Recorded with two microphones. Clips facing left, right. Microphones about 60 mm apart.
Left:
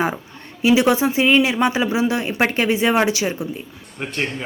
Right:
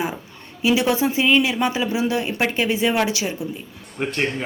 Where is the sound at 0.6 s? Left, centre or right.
Left.